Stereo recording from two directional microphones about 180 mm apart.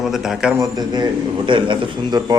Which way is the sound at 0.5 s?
20° right (ahead or behind).